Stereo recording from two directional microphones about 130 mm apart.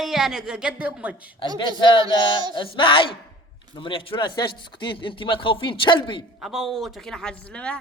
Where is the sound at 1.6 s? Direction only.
35° left (ahead or behind).